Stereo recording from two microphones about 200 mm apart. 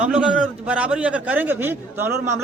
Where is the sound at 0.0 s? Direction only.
5° right (ahead or behind).